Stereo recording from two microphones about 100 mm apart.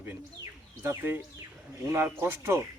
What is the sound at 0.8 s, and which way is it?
Speech, 25° right (ahead or behind).